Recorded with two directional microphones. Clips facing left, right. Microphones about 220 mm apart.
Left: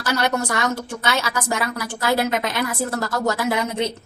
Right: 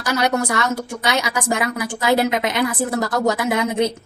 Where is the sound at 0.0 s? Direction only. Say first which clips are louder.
Right 2 dB; 10° right (ahead or behind).